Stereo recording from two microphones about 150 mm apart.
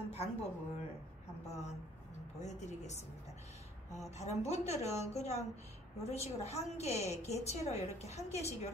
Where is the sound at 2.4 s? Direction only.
50° left (ahead or behind).